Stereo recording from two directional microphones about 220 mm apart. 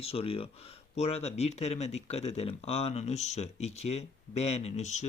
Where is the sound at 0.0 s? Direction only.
25° left (ahead or behind).